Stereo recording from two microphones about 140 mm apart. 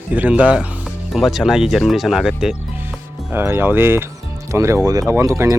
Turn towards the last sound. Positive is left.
turn(degrees=-20)  # may be behind; listen again after turning